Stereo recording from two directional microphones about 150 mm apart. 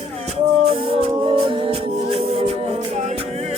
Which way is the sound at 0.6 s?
35° right (ahead or behind).